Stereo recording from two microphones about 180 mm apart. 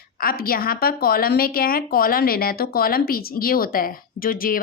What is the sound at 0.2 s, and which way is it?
A woman's voice, 55° left (ahead or behind).